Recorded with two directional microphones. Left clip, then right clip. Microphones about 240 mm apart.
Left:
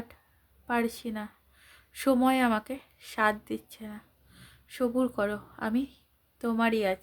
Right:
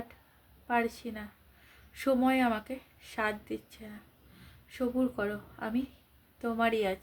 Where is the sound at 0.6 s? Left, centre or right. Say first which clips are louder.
Left 1 dB; left.